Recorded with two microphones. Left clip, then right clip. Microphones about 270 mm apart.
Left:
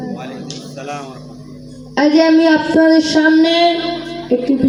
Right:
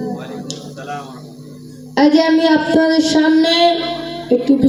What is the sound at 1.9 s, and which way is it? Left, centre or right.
Female singing, right.